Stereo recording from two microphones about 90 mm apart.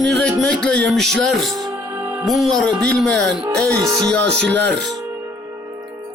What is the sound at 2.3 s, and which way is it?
A man's voice, centre (ahead or behind).